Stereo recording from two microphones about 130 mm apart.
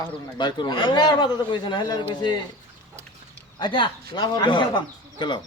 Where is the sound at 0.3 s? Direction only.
35° left (ahead or behind).